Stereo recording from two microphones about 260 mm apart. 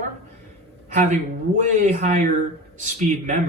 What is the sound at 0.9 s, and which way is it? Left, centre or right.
Speech, right.